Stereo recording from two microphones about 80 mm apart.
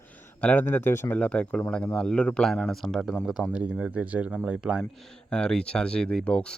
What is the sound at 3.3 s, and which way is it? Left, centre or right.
Speech, centre.